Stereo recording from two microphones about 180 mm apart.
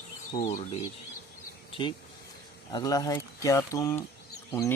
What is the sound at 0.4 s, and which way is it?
Speech, 40° left (ahead or behind).